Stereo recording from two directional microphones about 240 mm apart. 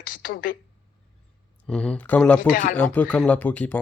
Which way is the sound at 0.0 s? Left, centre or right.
Left.